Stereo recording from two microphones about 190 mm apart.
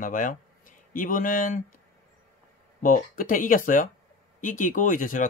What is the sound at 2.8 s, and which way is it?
Speech, 45° left (ahead or behind).